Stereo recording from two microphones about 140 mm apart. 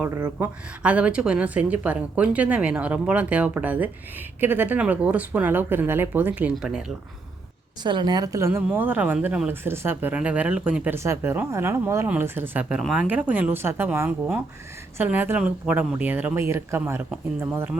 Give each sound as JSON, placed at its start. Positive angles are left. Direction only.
{"t": 0.2, "sound": "a woman's voice", "side_deg": -10}
{"t": 7.9, "sound": "a woman's voice", "side_deg": -35}
{"t": 10.9, "sound": "a woman's voice", "side_deg": -20}